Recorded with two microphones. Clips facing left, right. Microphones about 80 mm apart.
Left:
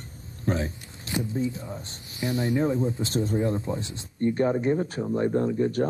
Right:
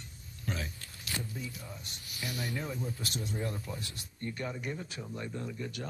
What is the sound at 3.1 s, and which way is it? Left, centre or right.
Speech, left.